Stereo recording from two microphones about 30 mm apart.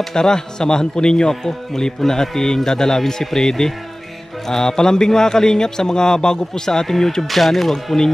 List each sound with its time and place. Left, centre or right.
0.0 s a man's voice: centre
7.2 s speech: centre
7.7 s speech: centre